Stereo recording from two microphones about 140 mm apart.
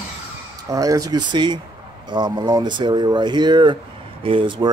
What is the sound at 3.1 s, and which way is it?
Speech, 30° right (ahead or behind).